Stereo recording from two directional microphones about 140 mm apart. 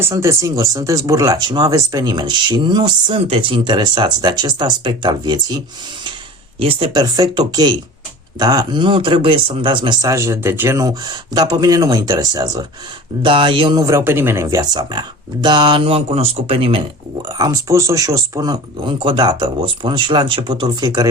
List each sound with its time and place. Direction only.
0.0 s speech: 20° right (ahead or behind)
13.2 s speech: 40° right (ahead or behind)
17.2 s speech: 25° right (ahead or behind)